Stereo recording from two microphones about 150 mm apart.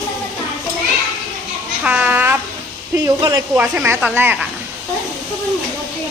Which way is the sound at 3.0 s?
25° right (ahead or behind).